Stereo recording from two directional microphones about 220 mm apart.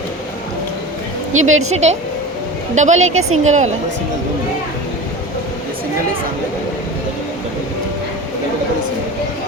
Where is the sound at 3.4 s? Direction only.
30° right (ahead or behind).